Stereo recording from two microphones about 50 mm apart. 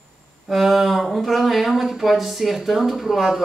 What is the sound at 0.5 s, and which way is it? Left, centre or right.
Speech, centre.